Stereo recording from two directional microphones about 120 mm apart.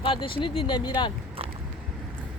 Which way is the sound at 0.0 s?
45° left (ahead or behind).